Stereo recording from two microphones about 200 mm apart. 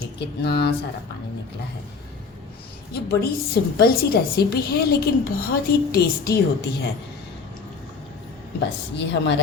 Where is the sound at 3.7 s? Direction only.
50° left (ahead or behind).